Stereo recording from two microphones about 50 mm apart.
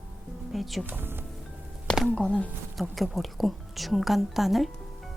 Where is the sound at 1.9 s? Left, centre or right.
Centre.